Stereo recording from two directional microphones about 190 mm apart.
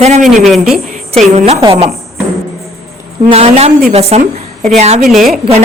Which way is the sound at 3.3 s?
35° right (ahead or behind).